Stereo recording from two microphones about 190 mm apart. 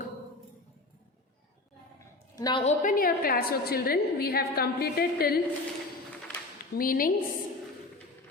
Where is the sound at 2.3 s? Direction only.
20° left (ahead or behind).